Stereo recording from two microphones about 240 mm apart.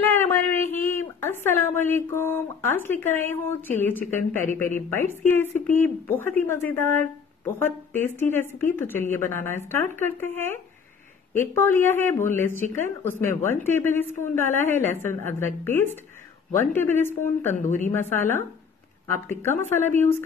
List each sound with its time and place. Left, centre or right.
0.1 s speech: centre
17.6 s a woman's voice: left
17.9 s speech: centre